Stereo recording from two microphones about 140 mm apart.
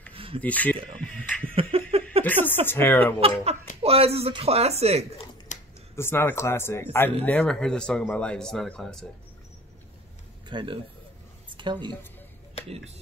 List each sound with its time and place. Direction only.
0.1 s a sound: 40° right (ahead or behind)
0.4 s speech: 10° left (ahead or behind)
1.5 s laughter: 40° right (ahead or behind)
2.4 s speech: 15° left (ahead or behind)
3.2 s speech: 45° right (ahead or behind)
5.5 s a sound: 60° left (ahead or behind)
5.9 s speech: 15° left (ahead or behind)
10.5 s a man's voice: 35° right (ahead or behind)
11.4 s a sound: 35° right (ahead or behind)
12.6 s speech: 45° right (ahead or behind)